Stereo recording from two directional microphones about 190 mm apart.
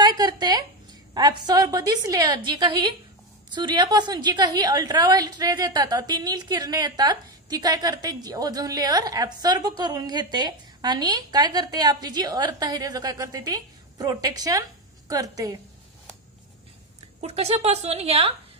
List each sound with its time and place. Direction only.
0.2 s a sound: 20° right (ahead or behind)
1.1 s a woman's voice: 20° right (ahead or behind)
17.2 s a woman's voice: 35° right (ahead or behind)